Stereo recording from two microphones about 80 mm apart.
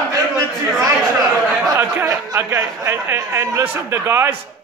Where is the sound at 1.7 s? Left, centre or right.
Right.